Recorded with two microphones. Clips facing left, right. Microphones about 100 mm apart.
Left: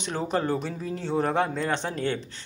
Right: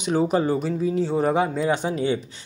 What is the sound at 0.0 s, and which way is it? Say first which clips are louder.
Speech: right 6 dB; 15° right (ahead or behind).